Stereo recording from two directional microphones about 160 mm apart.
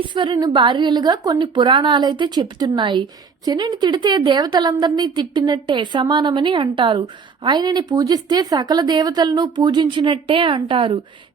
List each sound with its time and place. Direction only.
0.0 s a woman's voice: 30° right (ahead or behind)